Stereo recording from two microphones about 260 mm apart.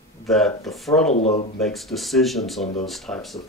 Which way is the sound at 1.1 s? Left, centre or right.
Left.